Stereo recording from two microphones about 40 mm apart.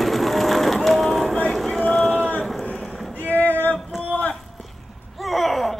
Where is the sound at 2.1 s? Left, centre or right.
Left.